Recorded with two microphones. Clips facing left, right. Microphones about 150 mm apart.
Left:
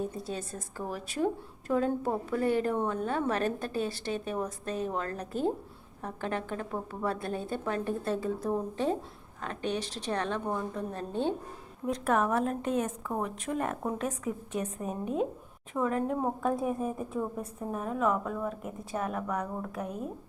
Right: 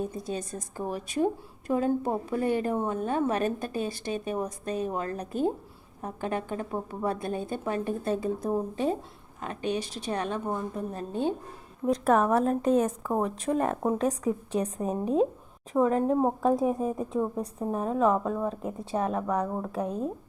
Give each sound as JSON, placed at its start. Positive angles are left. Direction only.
{"t": 0.0, "sound": "a woman's voice", "side_deg": -15}
{"t": 11.9, "sound": "a woman's voice", "side_deg": -35}